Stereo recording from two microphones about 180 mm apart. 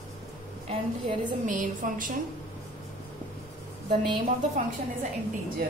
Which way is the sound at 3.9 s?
40° right (ahead or behind).